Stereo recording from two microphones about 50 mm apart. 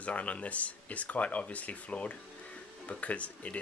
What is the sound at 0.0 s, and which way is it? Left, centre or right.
Speech, left.